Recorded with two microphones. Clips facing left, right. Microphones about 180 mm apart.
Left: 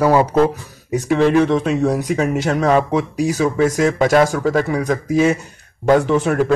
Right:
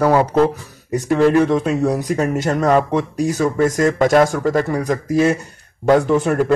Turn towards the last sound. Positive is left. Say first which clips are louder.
# even
turn(degrees=-5)  # may be behind; listen again after turning